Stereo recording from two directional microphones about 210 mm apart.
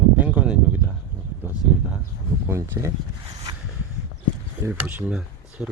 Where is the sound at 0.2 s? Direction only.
5° right (ahead or behind).